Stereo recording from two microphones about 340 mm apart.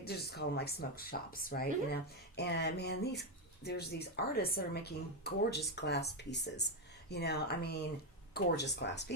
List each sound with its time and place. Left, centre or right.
0.0 s speech: left